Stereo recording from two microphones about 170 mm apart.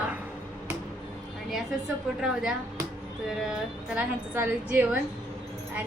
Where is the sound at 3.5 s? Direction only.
10° right (ahead or behind).